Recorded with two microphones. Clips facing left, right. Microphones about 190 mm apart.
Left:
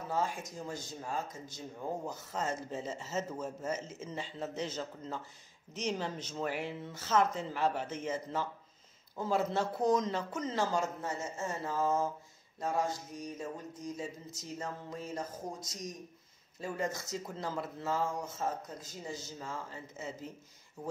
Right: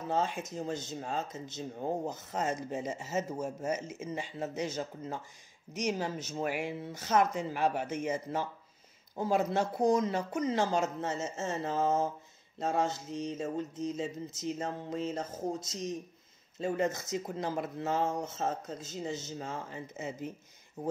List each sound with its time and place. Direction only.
0.1 s speech: 25° right (ahead or behind)
20.8 s speech: 40° right (ahead or behind)